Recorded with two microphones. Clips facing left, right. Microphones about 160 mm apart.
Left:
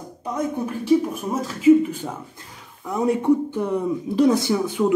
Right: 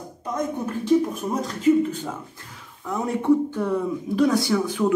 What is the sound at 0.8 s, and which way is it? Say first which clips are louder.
Speech: left 1 dB; 5° left (ahead or behind).